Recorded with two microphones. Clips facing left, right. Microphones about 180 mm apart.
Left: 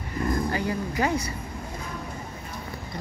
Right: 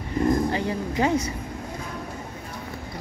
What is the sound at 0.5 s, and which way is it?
Speech, 20° right (ahead or behind).